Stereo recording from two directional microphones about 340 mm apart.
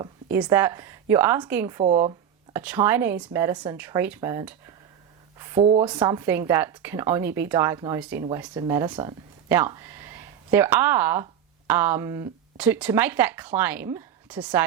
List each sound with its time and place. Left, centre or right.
0.0 s a woman's voice: centre
1.8 s speech: centre
2.5 s speech: centre
5.4 s a sound: centre
5.8 s speech: centre